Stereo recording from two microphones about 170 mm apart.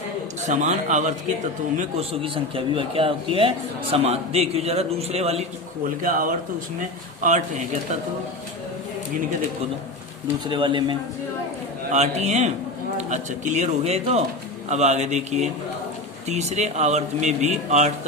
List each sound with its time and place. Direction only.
0.4 s a man's voice: 45° right (ahead or behind)
1.8 s speech: 35° right (ahead or behind)
6.0 s a man's voice: 55° right (ahead or behind)
10.4 s speech: 30° right (ahead or behind)
11.9 s speech: 40° right (ahead or behind)